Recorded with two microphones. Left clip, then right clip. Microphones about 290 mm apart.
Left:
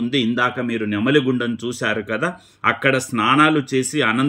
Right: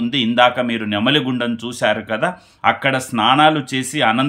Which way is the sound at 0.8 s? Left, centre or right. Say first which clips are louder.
Right 3 dB; right.